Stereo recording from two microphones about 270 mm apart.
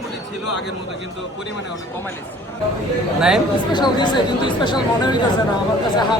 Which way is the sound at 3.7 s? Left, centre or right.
Centre.